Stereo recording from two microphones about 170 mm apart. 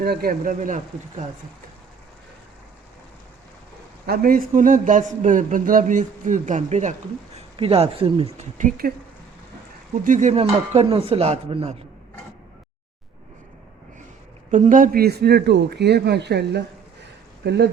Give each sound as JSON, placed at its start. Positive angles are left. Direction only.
{"t": 0.0, "sound": "speech", "side_deg": -65}
{"t": 4.0, "sound": "a man's voice", "side_deg": -60}
{"t": 10.0, "sound": "speech", "side_deg": -50}
{"t": 14.5, "sound": "speech", "side_deg": -50}